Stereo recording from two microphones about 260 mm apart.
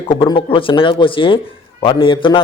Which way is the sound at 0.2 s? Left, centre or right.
Centre.